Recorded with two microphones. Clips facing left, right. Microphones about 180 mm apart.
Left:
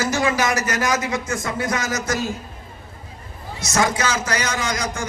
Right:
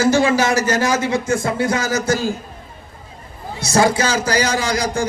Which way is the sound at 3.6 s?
30° right (ahead or behind).